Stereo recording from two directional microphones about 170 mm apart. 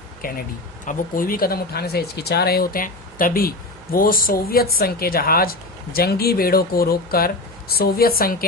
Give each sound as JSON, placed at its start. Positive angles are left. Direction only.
{"t": 0.2, "sound": "speech", "side_deg": 60}